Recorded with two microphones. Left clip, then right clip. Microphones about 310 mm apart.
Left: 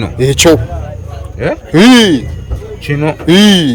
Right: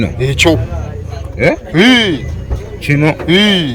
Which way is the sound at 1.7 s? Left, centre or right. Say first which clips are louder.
Left 6 dB; left.